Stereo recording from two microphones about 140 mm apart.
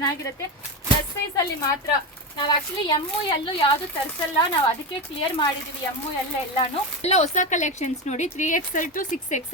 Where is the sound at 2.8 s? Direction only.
40° left (ahead or behind).